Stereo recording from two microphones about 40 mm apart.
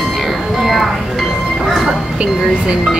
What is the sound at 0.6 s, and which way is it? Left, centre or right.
Music, centre.